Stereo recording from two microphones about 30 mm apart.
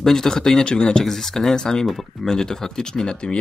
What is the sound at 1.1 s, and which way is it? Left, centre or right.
Speech, centre.